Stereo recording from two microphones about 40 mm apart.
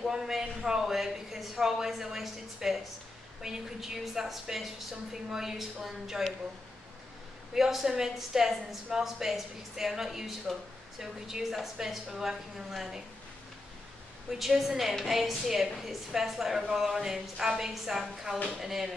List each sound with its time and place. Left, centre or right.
0.0 s speech: centre
7.5 s speech: centre
14.4 s speech: centre
18.3 s speech: right
18.6 s speech: centre